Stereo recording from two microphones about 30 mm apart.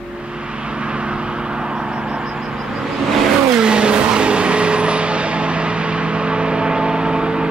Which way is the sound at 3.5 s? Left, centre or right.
Right.